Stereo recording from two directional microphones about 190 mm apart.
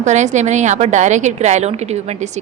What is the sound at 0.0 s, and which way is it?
A woman's voice, 40° right (ahead or behind).